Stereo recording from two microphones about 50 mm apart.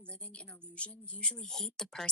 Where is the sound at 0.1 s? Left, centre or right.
Left.